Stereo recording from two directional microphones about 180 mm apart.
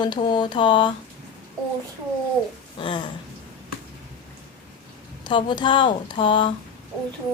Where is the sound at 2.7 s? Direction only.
25° left (ahead or behind).